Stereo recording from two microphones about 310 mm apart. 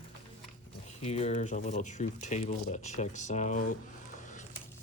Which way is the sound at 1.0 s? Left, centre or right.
Centre.